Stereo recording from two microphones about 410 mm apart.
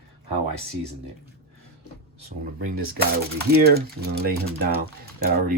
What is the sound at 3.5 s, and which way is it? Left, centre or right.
Speech, right.